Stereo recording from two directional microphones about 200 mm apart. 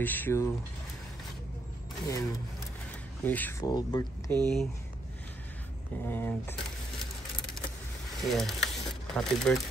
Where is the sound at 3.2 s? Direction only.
10° left (ahead or behind).